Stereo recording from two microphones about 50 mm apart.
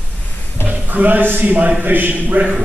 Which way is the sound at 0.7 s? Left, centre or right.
Right.